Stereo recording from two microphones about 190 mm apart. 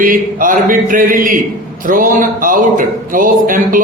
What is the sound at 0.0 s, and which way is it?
Speech, 45° right (ahead or behind).